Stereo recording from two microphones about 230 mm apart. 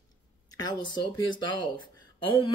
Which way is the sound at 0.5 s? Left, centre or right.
Centre.